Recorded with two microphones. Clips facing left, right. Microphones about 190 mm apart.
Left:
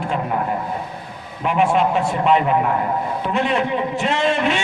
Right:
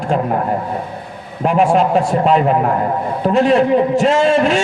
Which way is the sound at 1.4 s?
40° right (ahead or behind).